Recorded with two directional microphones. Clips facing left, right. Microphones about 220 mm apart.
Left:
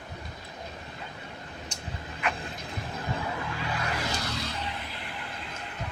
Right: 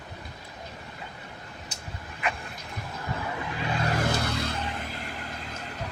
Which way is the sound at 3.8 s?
50° right (ahead or behind).